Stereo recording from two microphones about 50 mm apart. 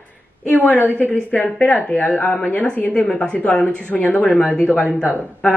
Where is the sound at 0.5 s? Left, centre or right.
Left.